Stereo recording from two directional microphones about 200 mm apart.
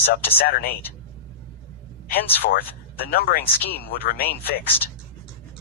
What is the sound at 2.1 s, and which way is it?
Speech, 50° left (ahead or behind).